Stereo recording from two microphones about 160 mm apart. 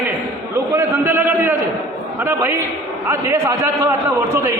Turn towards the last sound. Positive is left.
turn(degrees=-15)  # may be behind; listen again after turning